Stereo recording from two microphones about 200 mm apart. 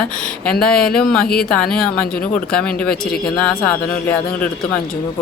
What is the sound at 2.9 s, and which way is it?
Speech, 50° left (ahead or behind).